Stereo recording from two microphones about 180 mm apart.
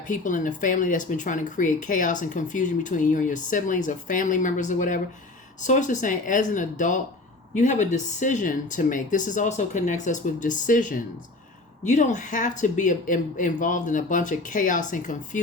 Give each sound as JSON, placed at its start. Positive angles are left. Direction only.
{"t": 0.1, "sound": "speech", "side_deg": 45}